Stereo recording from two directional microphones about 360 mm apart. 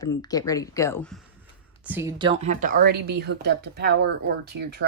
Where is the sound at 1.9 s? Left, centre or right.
Centre.